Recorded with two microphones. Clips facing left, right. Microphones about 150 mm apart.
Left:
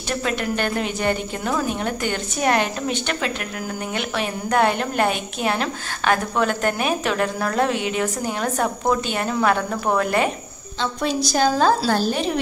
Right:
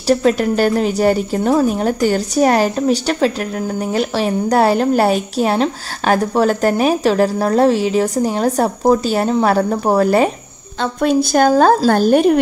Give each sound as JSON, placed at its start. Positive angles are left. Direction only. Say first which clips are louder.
{"t": 0.1, "sound": "a woman's voice", "louder": "right 10 dB", "side_deg": -35}
{"t": 10.8, "sound": "a woman's voice", "louder": "right 8 dB", "side_deg": -55}